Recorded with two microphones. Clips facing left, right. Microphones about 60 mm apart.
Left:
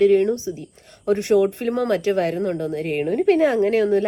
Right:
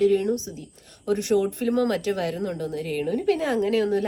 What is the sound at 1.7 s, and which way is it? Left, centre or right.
A woman's voice, left.